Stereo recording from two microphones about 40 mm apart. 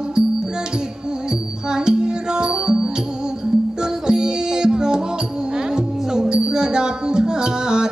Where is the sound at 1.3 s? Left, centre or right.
Centre.